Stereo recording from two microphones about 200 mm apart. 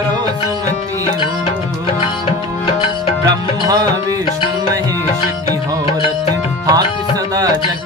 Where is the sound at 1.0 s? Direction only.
25° left (ahead or behind).